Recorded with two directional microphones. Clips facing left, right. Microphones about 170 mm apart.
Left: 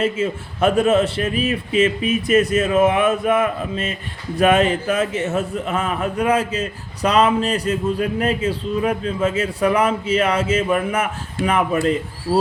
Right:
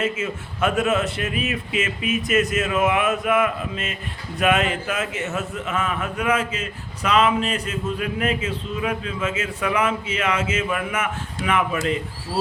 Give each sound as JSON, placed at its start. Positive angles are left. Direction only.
{"t": 0.0, "sound": "speech", "side_deg": 30}